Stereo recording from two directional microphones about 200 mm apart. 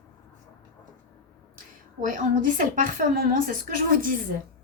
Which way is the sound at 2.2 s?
40° right (ahead or behind).